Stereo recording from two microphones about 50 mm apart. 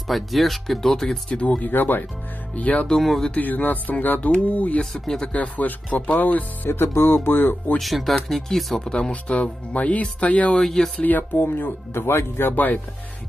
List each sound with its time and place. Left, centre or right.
0.1 s speech: centre
1.6 s speech: left
2.5 s speech: left
4.9 s speech: centre
5.2 s speech: left
6.7 s speech: left
7.8 s speech: centre
9.1 s speech: left
10.5 s speech: centre
11.0 s speech: left
12.5 s speech: left